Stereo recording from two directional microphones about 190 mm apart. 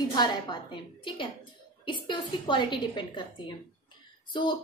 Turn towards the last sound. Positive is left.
turn(degrees=25)  # may be behind; listen again after turning